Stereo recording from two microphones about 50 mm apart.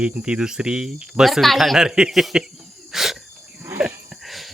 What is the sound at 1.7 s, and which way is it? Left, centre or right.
Speech, centre.